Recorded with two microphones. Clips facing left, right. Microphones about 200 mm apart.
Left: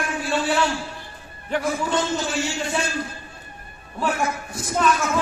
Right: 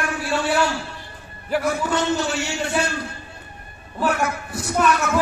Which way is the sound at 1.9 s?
65° right (ahead or behind).